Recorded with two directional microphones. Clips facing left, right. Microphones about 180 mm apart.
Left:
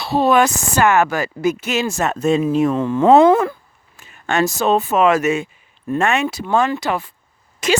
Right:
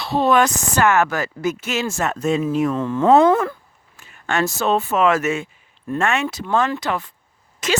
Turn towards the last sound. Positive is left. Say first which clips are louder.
# left 4 dB
turn(degrees=10)  # may be behind; listen again after turning